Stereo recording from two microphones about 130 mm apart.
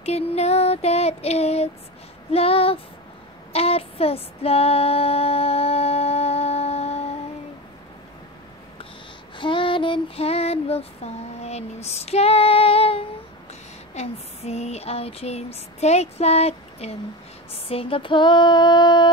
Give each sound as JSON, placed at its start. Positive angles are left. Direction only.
{"t": 0.0, "sound": "female singing", "side_deg": 55}
{"t": 9.4, "sound": "child singing", "side_deg": 40}
{"t": 13.9, "sound": "a sound", "side_deg": 55}
{"t": 17.6, "sound": "female singing", "side_deg": 45}